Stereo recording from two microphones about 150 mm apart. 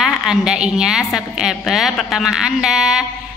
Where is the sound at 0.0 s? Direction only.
5° right (ahead or behind).